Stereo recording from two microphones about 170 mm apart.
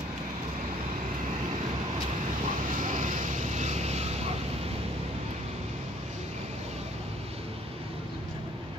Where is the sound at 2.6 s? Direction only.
50° right (ahead or behind).